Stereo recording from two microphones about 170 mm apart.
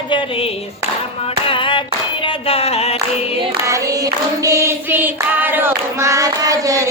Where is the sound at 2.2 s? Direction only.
35° left (ahead or behind).